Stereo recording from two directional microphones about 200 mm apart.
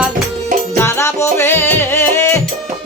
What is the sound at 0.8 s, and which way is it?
Music, 15° left (ahead or behind).